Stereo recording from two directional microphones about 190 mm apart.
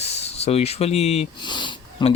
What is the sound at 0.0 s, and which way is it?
Speech, 35° left (ahead or behind).